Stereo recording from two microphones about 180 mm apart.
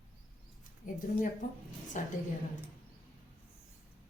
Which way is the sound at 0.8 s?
50° left (ahead or behind).